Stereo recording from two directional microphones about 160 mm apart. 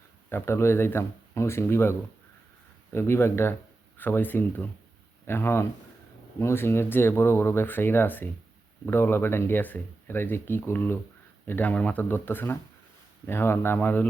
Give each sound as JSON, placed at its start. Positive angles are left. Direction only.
{"t": 0.3, "sound": "speech", "side_deg": 15}